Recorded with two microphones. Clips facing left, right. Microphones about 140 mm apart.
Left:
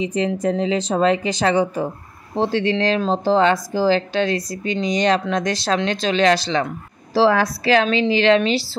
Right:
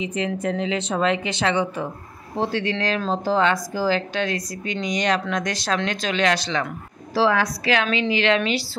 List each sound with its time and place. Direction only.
0.0 s speech: 35° left (ahead or behind)
2.3 s speech: 30° left (ahead or behind)